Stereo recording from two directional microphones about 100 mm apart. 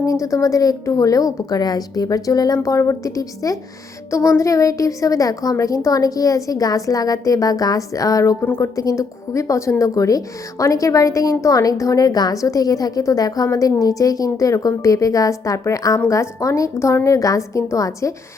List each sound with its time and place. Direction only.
0.0 s a woman's voice: 35° left (ahead or behind)
8.4 s speech: 20° left (ahead or behind)
8.7 s a woman's voice: 35° left (ahead or behind)